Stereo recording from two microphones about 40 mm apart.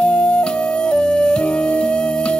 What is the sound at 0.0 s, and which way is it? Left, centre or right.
Music, left.